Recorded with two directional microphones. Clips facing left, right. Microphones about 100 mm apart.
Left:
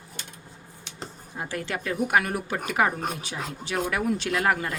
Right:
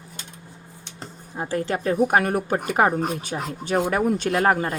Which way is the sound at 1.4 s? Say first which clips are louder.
Right 6 dB; 30° right (ahead or behind).